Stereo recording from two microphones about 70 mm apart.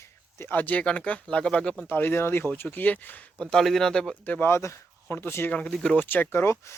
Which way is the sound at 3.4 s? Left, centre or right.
Centre.